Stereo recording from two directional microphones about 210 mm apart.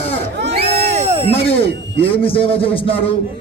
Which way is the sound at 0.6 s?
30° right (ahead or behind).